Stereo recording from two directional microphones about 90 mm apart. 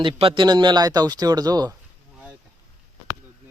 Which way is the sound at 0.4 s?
55° right (ahead or behind).